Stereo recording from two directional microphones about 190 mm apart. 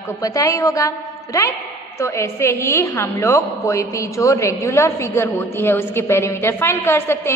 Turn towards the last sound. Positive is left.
turn(degrees=10)  # may be behind; listen again after turning